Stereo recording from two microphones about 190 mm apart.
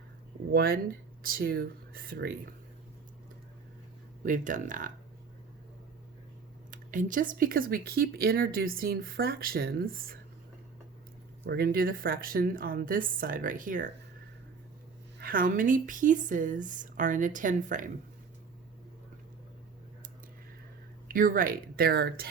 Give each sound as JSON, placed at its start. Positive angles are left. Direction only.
{"t": 0.5, "sound": "speech", "side_deg": -50}
{"t": 4.2, "sound": "speech", "side_deg": -45}
{"t": 6.7, "sound": "speech", "side_deg": -45}
{"t": 11.4, "sound": "speech", "side_deg": -50}
{"t": 15.2, "sound": "speech", "side_deg": -45}
{"t": 21.1, "sound": "speech", "side_deg": -45}